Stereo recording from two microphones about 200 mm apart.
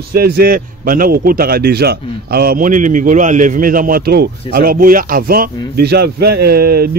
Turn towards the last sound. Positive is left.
turn(degrees=-50)  # may be behind; listen again after turning